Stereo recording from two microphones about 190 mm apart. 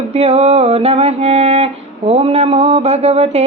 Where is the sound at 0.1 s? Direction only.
35° right (ahead or behind).